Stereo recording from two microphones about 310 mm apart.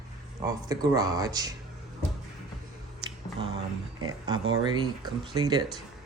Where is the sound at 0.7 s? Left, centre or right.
Centre.